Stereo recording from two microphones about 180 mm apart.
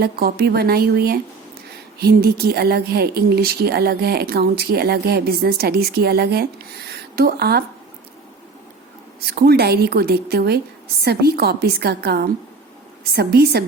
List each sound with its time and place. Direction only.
0.0 s speech: 60° right (ahead or behind)
9.2 s speech: 60° right (ahead or behind)